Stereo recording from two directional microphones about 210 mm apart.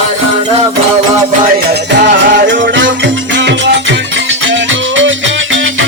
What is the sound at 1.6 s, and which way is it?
Music, 40° right (ahead or behind).